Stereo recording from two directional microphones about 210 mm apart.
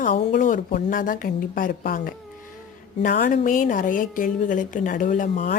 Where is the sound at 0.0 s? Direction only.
40° left (ahead or behind).